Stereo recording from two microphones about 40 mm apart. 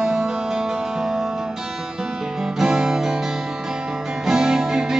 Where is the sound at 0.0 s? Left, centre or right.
Centre.